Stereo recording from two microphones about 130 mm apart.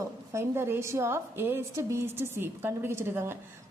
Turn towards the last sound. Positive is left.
turn(degrees=-20)  # may be behind; listen again after turning